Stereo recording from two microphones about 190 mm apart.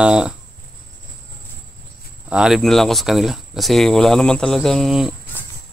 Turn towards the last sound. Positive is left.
turn(degrees=0)  # may be behind; listen again after turning